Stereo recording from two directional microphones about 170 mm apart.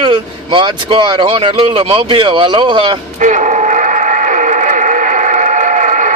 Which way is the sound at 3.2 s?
45° right (ahead or behind).